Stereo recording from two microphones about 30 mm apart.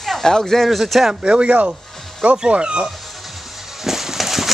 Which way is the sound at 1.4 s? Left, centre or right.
Right.